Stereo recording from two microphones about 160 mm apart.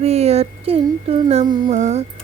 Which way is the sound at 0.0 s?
40° right (ahead or behind).